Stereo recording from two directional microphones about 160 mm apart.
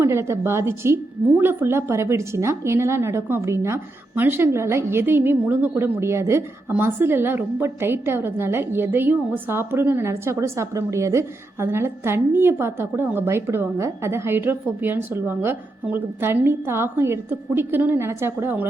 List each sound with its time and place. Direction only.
0.0 s a woman's voice: 15° right (ahead or behind)